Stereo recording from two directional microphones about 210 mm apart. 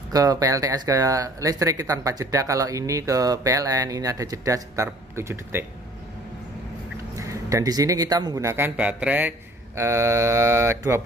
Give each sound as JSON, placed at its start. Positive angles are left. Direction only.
{"t": 0.1, "sound": "speech", "side_deg": -15}
{"t": 7.2, "sound": "speech", "side_deg": -15}